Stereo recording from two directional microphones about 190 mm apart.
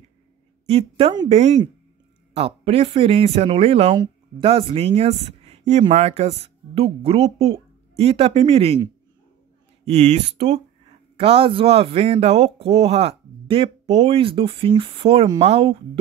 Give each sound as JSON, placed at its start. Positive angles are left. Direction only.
{"t": 0.7, "sound": "speech", "side_deg": -30}
{"t": 9.8, "sound": "speech", "side_deg": -35}